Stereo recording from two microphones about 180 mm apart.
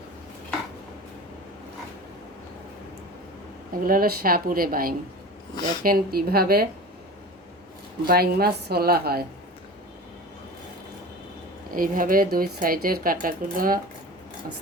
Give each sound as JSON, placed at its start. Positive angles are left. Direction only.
{"t": 3.7, "sound": "a woman's voice", "side_deg": -55}
{"t": 8.0, "sound": "a woman's voice", "side_deg": -55}
{"t": 11.7, "sound": "speech", "side_deg": -50}